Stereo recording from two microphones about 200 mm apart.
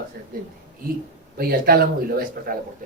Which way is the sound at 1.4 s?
50° right (ahead or behind).